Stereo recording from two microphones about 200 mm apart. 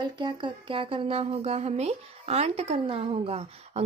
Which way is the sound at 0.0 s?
20° right (ahead or behind).